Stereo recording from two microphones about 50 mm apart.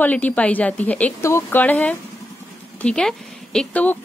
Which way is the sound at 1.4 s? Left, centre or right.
Left.